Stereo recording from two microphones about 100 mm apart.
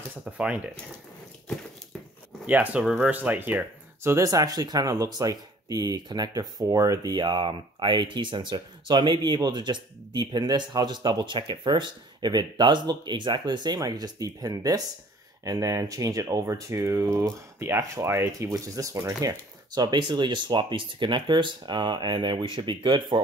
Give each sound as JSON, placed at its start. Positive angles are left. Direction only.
{"t": 0.2, "sound": "speech", "side_deg": -10}
{"t": 2.4, "sound": "speech", "side_deg": -15}